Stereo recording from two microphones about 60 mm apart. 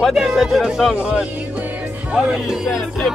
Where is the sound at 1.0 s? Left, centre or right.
Centre.